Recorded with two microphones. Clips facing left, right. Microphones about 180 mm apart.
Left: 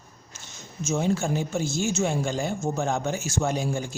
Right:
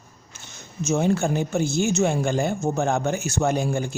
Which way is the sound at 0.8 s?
55° right (ahead or behind).